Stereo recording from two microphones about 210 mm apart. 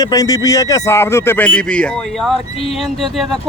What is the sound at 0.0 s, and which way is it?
Speech, 15° left (ahead or behind).